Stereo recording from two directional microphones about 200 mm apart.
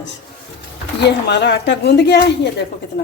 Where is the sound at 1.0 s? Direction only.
60° left (ahead or behind).